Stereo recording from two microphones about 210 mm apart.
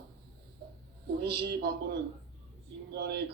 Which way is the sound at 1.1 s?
50° right (ahead or behind).